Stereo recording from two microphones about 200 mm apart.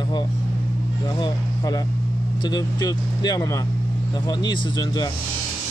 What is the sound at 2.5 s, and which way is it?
Speech, 20° left (ahead or behind).